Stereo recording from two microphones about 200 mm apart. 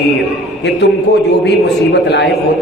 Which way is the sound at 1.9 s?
60° left (ahead or behind).